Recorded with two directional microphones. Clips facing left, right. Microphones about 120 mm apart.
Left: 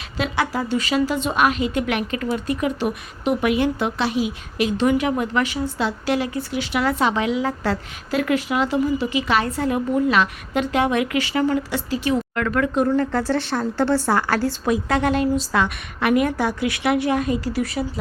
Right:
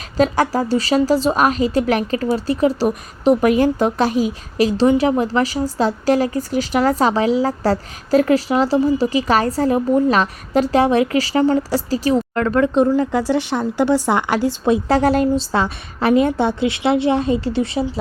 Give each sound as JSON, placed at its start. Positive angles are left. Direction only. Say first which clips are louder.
{"t": 0.2, "sound": "a woman's voice", "louder": "right 7 dB", "side_deg": -40}
{"t": 13.0, "sound": "a woman's voice", "louder": "right 3 dB", "side_deg": -15}
{"t": 14.7, "sound": "a woman's voice", "louder": "right 5 dB", "side_deg": -35}